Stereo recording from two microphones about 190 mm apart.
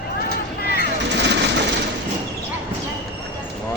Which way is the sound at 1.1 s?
65° right (ahead or behind).